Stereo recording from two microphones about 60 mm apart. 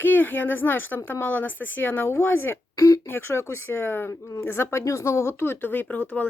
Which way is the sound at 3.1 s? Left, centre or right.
Left.